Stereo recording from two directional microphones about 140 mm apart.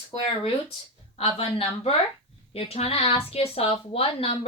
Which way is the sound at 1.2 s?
45° left (ahead or behind).